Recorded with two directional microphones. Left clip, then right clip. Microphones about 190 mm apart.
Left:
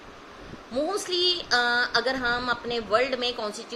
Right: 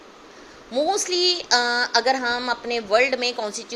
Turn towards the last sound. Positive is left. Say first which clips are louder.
# right 4 dB
turn(degrees=-20)  # may be behind; listen again after turning